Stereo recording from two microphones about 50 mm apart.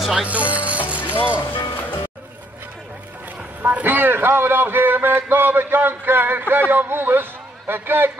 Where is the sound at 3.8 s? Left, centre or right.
Right.